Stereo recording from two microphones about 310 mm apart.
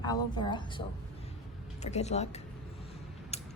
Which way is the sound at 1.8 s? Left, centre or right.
Left.